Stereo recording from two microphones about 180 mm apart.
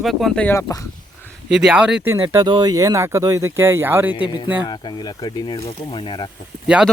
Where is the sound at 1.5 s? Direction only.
5° right (ahead or behind).